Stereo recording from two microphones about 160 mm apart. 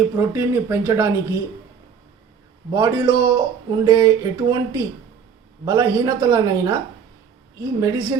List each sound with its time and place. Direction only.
0.2 s speech: 15° right (ahead or behind)
2.7 s speech: 30° right (ahead or behind)